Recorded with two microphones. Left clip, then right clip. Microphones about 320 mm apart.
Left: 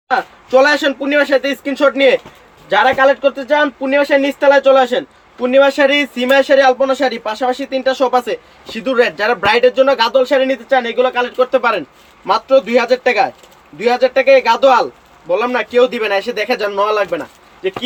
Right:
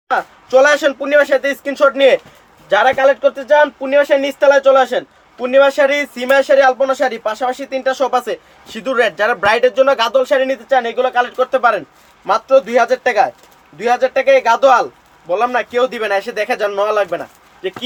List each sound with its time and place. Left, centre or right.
0.1 s speech: right
6.1 s speech: right